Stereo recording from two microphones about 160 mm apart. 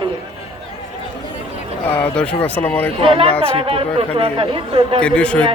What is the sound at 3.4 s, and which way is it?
Speech, 35° right (ahead or behind).